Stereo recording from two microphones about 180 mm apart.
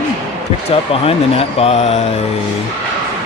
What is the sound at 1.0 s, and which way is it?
Speech, 35° left (ahead or behind).